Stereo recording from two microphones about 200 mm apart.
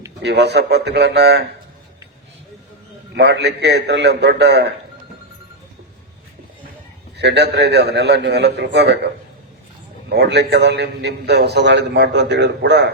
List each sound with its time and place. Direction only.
0.2 s a man's voice: 55° right (ahead or behind)
3.2 s a man's voice: 60° right (ahead or behind)
7.2 s a man's voice: 55° right (ahead or behind)
10.2 s a man's voice: 55° right (ahead or behind)